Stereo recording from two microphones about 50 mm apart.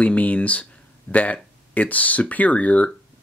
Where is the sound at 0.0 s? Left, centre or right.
Left.